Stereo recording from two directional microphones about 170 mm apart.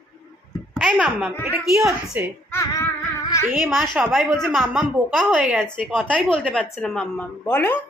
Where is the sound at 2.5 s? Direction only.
15° left (ahead or behind).